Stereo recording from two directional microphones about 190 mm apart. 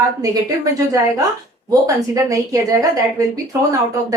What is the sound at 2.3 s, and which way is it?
A woman's voice, 20° right (ahead or behind).